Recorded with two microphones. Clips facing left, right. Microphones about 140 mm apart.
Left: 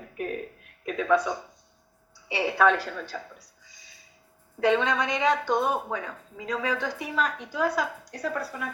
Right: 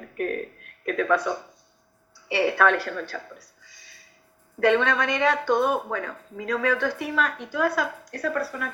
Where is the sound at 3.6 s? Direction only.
65° right (ahead or behind).